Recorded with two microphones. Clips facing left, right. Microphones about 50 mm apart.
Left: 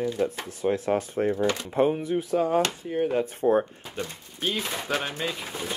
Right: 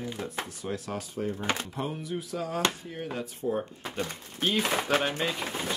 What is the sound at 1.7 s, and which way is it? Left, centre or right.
Speech, left.